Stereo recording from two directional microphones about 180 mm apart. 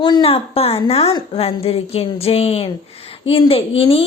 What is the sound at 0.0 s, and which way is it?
A woman's voice, 25° left (ahead or behind).